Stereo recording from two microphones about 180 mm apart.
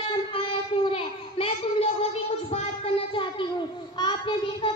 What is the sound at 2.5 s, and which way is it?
Child singing, 30° left (ahead or behind).